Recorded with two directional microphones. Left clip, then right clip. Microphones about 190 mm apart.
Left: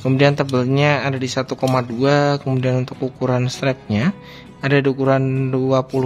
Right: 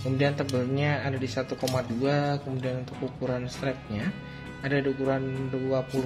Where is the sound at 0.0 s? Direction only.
40° left (ahead or behind).